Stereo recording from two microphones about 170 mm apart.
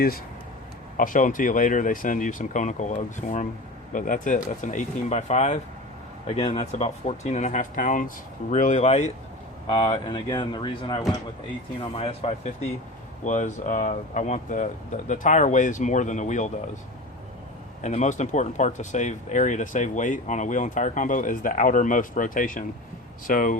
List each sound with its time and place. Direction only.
0.9 s speech: 50° left (ahead or behind)
17.8 s speech: 45° left (ahead or behind)